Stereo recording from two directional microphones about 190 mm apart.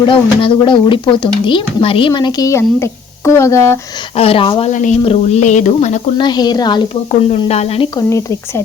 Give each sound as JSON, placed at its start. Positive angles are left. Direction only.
{"t": 0.0, "sound": "speech", "side_deg": 25}
{"t": 4.1, "sound": "speech", "side_deg": 30}
{"t": 6.1, "sound": "speech", "side_deg": 20}
{"t": 7.1, "sound": "speech", "side_deg": 35}